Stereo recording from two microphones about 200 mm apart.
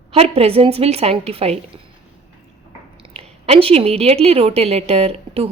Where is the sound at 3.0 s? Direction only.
30° right (ahead or behind).